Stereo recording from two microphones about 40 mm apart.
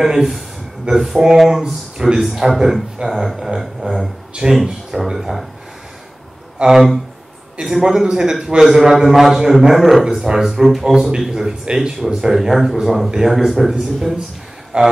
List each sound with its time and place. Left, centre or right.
0.0 s speech: centre
2.2 s speech: centre
4.4 s speech: centre
6.6 s speech: centre
10.1 s speech: centre
10.4 s speech: centre
11.6 s speech: centre
14.7 s speech: right